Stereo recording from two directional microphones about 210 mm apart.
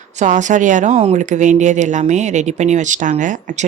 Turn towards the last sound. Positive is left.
turn(degrees=-35)  # may be behind; listen again after turning